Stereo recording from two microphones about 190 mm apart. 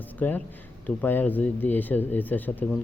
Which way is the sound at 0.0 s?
10° left (ahead or behind).